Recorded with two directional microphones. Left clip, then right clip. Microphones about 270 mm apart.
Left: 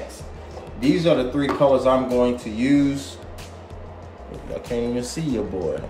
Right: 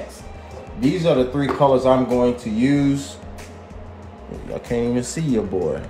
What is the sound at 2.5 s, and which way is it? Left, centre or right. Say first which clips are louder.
Speech: right 1 dB; centre.